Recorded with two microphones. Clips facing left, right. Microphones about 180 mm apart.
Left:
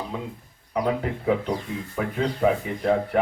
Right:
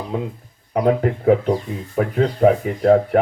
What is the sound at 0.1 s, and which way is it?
Speech, 45° right (ahead or behind).